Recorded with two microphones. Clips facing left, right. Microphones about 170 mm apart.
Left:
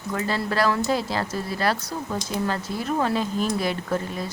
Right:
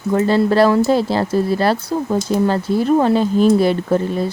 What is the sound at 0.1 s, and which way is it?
Speech, 30° right (ahead or behind).